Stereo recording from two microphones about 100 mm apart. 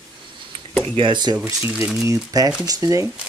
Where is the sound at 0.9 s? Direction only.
55° right (ahead or behind).